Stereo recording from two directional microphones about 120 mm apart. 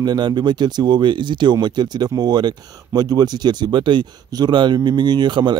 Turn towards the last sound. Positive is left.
turn(degrees=-40)  # may be behind; listen again after turning